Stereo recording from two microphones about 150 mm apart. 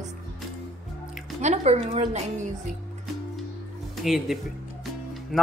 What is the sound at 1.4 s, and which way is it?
Speech, 45° right (ahead or behind).